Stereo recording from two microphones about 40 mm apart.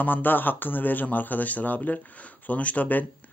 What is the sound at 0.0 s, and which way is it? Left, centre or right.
Speech, left.